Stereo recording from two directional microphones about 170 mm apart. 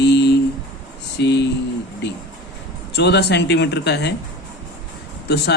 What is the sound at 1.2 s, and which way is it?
Speech, 90° left.